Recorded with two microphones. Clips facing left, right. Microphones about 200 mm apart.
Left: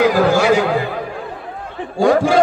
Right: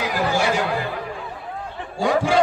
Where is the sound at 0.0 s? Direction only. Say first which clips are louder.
Left 9 dB; 90° left.